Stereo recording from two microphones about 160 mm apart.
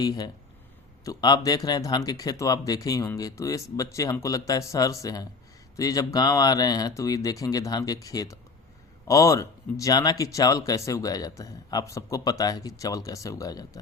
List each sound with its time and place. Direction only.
0.0 s speech: 25° left (ahead or behind)